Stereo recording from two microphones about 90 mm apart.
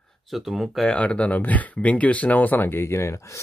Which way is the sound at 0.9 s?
15° left (ahead or behind).